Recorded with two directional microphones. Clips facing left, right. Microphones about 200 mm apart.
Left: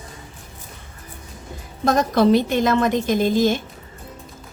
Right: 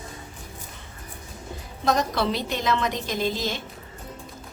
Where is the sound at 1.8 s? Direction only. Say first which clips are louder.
Left 7 dB; 50° left (ahead or behind).